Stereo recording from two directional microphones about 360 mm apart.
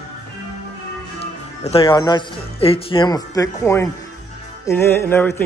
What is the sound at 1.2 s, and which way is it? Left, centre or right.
Speech, centre.